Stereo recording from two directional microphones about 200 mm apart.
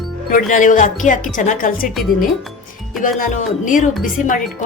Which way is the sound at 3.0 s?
40° left (ahead or behind).